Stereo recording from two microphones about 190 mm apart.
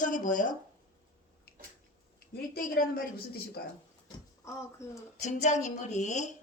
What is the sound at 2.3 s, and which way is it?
Speech, 50° left (ahead or behind).